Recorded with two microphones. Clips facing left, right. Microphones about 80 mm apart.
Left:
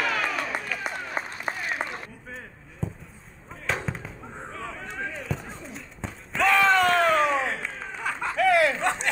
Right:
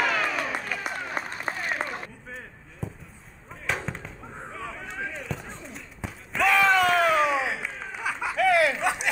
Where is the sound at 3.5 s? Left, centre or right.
Centre.